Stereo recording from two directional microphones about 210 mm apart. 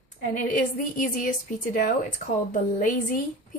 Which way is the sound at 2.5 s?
40° left (ahead or behind).